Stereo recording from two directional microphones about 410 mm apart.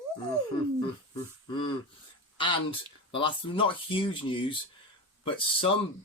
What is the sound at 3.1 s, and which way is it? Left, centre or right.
Speech, centre.